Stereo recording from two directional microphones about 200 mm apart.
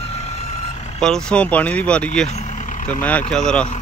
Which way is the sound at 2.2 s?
35° left (ahead or behind).